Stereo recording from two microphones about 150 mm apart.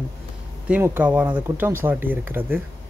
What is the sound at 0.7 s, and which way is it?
Speech, 10° right (ahead or behind).